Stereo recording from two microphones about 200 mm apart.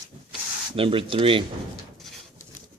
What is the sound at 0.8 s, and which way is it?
Speech, 25° right (ahead or behind).